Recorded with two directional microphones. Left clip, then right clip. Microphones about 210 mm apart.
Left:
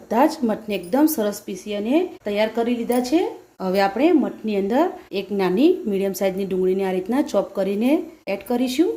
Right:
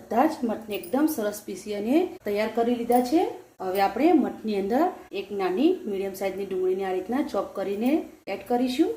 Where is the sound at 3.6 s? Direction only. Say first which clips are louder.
Left 4 dB; 45° left (ahead or behind).